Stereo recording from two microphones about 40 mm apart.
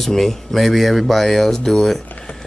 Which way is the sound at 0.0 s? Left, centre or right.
Centre.